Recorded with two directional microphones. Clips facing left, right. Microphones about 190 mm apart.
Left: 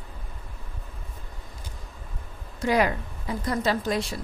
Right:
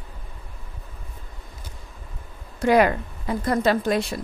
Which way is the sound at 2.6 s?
60° right (ahead or behind).